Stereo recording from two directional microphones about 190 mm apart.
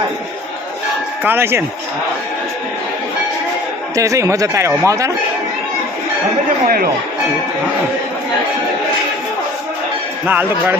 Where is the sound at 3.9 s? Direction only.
15° right (ahead or behind).